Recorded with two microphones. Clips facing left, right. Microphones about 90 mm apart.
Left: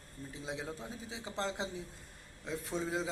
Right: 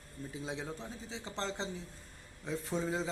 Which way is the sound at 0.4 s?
5° left (ahead or behind).